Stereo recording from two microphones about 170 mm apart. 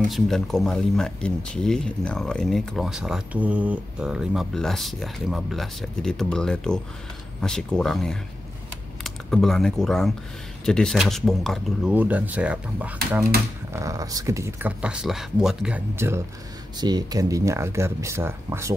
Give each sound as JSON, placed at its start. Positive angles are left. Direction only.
{"t": 0.1, "sound": "speech", "side_deg": 0}
{"t": 11.9, "sound": "speech", "side_deg": -10}
{"t": 13.7, "sound": "speech", "side_deg": -20}
{"t": 16.0, "sound": "speech", "side_deg": -15}